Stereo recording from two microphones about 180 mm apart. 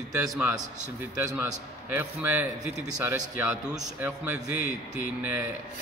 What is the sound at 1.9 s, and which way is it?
A man's voice, 10° right (ahead or behind).